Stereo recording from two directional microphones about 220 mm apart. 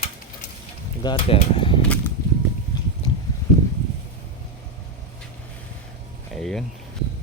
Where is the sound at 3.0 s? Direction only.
20° left (ahead or behind).